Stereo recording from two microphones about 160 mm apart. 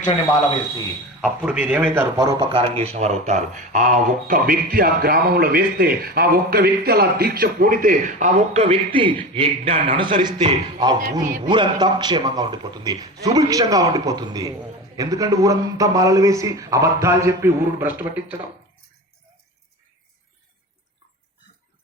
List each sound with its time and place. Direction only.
1.2 s a man's voice: 5° right (ahead or behind)
2.1 s speech: 20° right (ahead or behind)
2.5 s speech: 35° right (ahead or behind); by 18.3 s 10° right (ahead or behind)